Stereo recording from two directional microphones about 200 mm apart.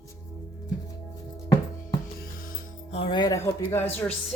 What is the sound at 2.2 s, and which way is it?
Music, 45° left (ahead or behind).